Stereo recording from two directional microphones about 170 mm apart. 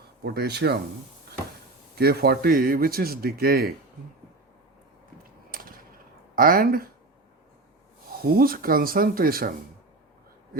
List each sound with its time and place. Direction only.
0.2 s speech: 75° right (ahead or behind)
2.0 s a man's voice: 65° right (ahead or behind)
5.5 s a sound: 60° right (ahead or behind)
6.3 s a man's voice: 55° right (ahead or behind)
8.2 s a man's voice: 60° right (ahead or behind)